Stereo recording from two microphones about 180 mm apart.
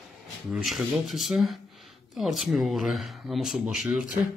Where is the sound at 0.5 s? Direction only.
Centre (ahead or behind).